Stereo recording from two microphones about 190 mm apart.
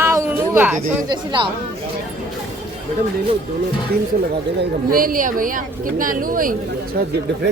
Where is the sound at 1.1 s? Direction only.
25° right (ahead or behind).